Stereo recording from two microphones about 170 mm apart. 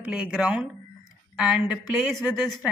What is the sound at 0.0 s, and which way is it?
Speech, 5° right (ahead or behind).